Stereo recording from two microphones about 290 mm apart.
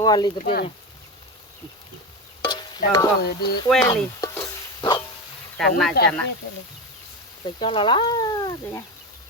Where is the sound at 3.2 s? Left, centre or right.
Left.